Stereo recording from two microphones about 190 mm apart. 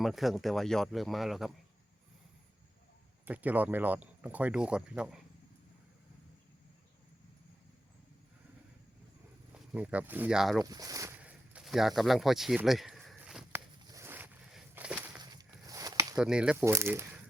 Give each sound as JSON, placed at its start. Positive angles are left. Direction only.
{"t": 0.0, "sound": "speech", "side_deg": 0}
{"t": 3.2, "sound": "speech", "side_deg": -10}
{"t": 9.7, "sound": "speech", "side_deg": -10}
{"t": 10.6, "sound": "speech", "side_deg": -20}
{"t": 11.2, "sound": "a sound", "side_deg": -5}
{"t": 15.2, "sound": "a sound", "side_deg": -20}
{"t": 16.1, "sound": "speech", "side_deg": -5}